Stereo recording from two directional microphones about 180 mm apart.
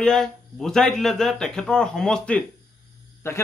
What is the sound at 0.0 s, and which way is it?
Speech, 5° left (ahead or behind).